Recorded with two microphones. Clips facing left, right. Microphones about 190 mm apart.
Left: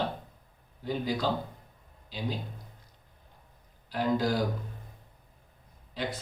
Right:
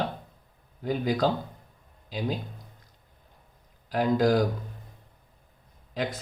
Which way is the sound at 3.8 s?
45° right (ahead or behind).